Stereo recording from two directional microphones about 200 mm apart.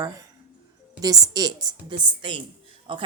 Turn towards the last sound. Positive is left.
turn(degrees=-25)  # may be behind; listen again after turning